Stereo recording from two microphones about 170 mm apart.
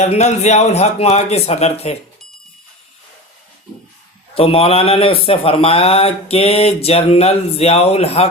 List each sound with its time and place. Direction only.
0.0 s a man's voice: 40° left (ahead or behind)
4.4 s a man's voice: 35° left (ahead or behind)